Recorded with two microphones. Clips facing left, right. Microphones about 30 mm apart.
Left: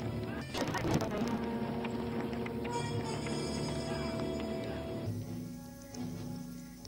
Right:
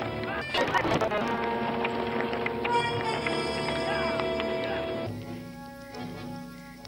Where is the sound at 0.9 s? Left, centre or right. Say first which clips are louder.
Right 8 dB; right.